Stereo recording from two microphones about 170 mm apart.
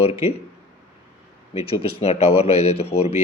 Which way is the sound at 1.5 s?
35° left (ahead or behind).